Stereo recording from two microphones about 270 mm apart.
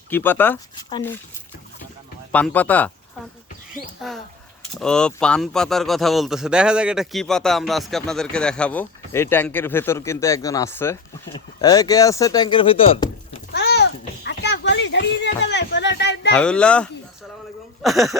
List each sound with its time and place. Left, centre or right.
0.1 s chopping: centre
2.3 s speech: centre
4.0 s speech: centre
11.6 s chopping: centre
13.5 s children playing: left
16.3 s speech: centre